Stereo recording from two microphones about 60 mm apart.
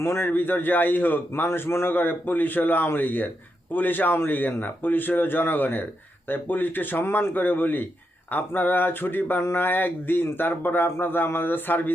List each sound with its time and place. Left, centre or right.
0.0 s a man's voice: left